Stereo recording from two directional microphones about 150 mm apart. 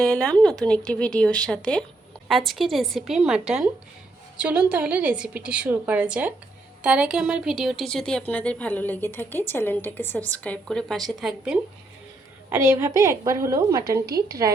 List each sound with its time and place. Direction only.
0.0 s a woman's voice: 5° left (ahead or behind)
12.5 s a woman's voice: 15° right (ahead or behind)